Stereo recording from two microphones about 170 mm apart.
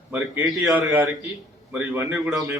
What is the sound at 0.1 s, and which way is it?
Speech, 5° right (ahead or behind).